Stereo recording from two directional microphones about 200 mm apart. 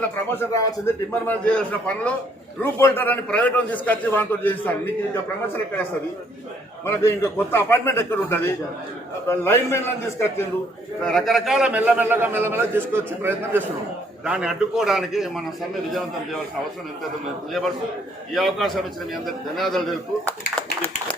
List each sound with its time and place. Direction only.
0.0 s a man's voice: 10° left (ahead or behind)
6.8 s a man's voice: 10° left (ahead or behind)
11.0 s a man's voice: centre (ahead or behind)
18.3 s a man's voice: centre (ahead or behind)